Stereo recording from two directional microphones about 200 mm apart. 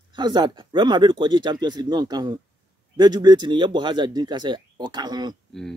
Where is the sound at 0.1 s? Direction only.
20° right (ahead or behind).